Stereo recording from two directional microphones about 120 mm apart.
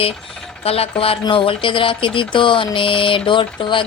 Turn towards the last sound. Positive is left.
turn(degrees=45)  # may be behind; listen again after turning